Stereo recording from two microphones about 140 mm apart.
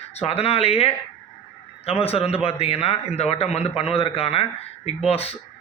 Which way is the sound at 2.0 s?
45° left (ahead or behind).